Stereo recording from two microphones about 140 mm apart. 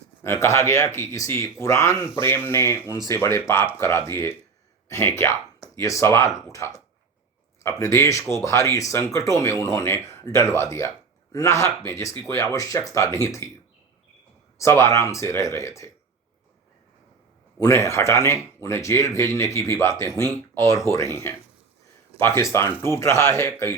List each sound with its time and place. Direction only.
0.2 s speech: 20° left (ahead or behind)
14.6 s speech: 20° left (ahead or behind)
17.6 s speech: 20° left (ahead or behind)
22.8 s speech: 20° left (ahead or behind)